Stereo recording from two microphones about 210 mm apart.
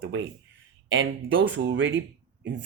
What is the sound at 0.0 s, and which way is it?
Speech, 60° right (ahead or behind).